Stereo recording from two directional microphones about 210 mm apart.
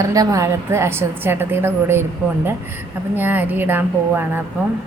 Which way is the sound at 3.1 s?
10° right (ahead or behind).